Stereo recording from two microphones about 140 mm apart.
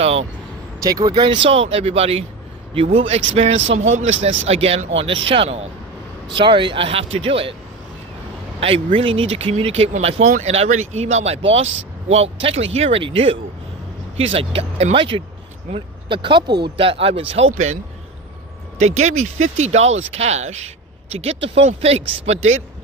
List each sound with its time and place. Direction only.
0.0 s vehicle: 45° right (ahead or behind)
0.8 s speech: 25° right (ahead or behind); by 7.5 s 40° right (ahead or behind)
8.6 s speech: 40° right (ahead or behind)
18.8 s speech: 55° right (ahead or behind)